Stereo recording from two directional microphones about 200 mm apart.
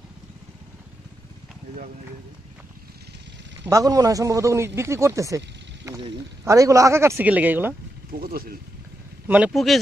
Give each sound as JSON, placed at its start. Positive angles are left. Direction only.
{"t": 3.6, "sound": "a man's voice", "side_deg": -15}
{"t": 6.4, "sound": "a man's voice", "side_deg": -15}
{"t": 8.1, "sound": "speech", "side_deg": -45}
{"t": 9.3, "sound": "speech", "side_deg": -5}